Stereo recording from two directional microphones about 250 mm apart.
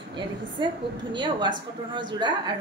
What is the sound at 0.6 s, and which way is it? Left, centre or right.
A woman's voice, centre.